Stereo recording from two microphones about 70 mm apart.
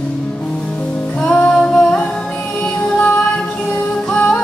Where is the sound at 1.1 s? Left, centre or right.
Centre.